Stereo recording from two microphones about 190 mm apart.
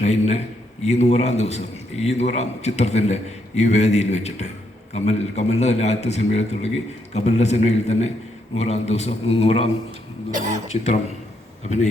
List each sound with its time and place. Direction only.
0.0 s a man's voice: 35° left (ahead or behind)
10.3 s speech: 40° right (ahead or behind)
10.7 s a man's voice: 35° left (ahead or behind)